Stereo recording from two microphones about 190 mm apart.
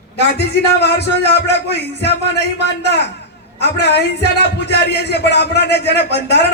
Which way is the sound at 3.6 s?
60° left (ahead or behind).